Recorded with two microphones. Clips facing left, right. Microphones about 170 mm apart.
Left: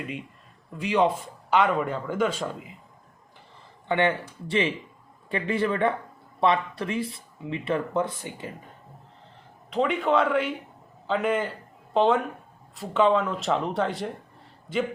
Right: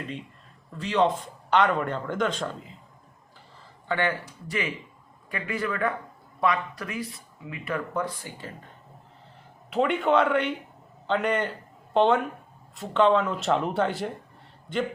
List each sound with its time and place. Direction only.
0.7 s a man's voice: 10° left (ahead or behind)
3.8 s speech: 20° left (ahead or behind)
9.6 s a man's voice: centre (ahead or behind)